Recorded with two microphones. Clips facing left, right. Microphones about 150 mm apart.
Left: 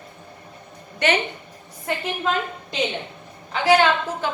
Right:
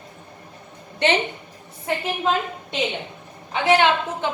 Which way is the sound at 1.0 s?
30° right (ahead or behind).